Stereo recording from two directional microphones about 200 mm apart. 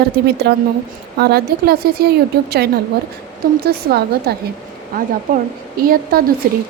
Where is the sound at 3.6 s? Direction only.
50° right (ahead or behind).